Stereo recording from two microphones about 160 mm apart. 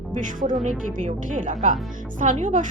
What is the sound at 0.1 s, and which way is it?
Speech, 55° right (ahead or behind).